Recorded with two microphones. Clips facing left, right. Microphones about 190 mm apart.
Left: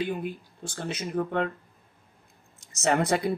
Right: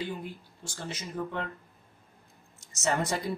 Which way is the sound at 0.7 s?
55° left (ahead or behind).